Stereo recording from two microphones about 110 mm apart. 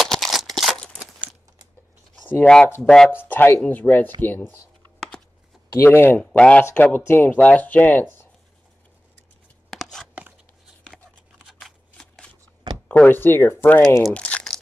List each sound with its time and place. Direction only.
0.0 s a sound: centre (ahead or behind)
2.2 s speech: 15° left (ahead or behind)
2.8 s speech: 5° left (ahead or behind)
3.1 s speech: 20° left (ahead or behind)
5.8 s speech: 20° left (ahead or behind)
9.7 s a sound: centre (ahead or behind)
11.4 s shuffling cards: 5° left (ahead or behind)
12.8 s speech: 15° left (ahead or behind)
14.1 s crumpling: 10° left (ahead or behind)